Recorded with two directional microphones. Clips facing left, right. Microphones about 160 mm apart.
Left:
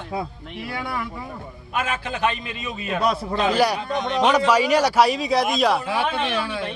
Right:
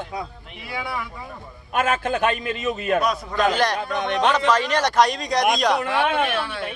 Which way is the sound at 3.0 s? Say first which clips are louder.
Left 1 dB; 30° left (ahead or behind).